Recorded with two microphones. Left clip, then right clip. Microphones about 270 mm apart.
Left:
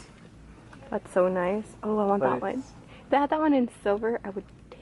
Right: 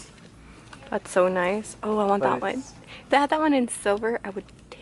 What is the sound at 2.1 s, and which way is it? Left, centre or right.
Speech, centre.